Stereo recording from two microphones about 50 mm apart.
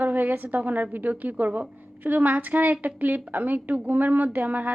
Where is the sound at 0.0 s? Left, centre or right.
Right.